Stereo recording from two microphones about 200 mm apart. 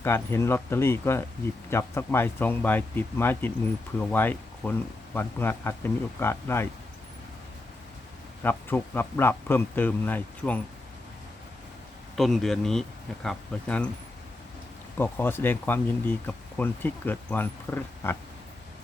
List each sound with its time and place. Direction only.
0.0 s speech: 10° left (ahead or behind)
8.4 s speech: 10° left (ahead or behind)
12.1 s speech: centre (ahead or behind)
14.9 s speech: 10° left (ahead or behind)